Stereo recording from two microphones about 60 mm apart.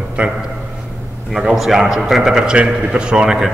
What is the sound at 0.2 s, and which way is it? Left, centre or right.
Speech, centre.